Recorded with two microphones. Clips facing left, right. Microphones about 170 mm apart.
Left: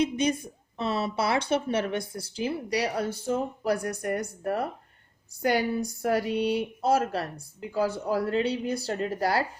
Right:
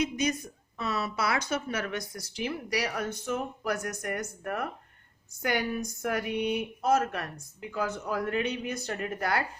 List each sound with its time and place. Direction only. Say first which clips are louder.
0.0 s speech: left 4 dB; 30° left (ahead or behind)